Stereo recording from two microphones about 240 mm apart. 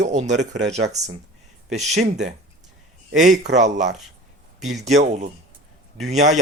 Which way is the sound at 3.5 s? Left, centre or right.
Right.